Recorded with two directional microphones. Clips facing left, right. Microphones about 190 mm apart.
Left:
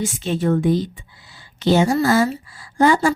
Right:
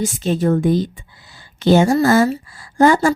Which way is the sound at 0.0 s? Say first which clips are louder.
Right 3 dB; 40° right (ahead or behind).